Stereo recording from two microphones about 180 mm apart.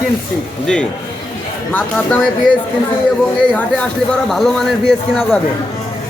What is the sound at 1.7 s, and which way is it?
Speech, 5° left (ahead or behind).